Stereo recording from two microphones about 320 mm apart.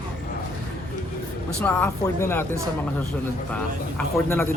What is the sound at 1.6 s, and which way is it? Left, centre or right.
Speech, centre.